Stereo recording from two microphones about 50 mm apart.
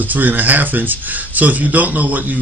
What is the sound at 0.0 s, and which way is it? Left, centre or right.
Speech, right.